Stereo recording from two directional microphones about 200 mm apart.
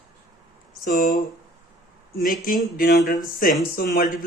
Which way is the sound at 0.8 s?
40° left (ahead or behind).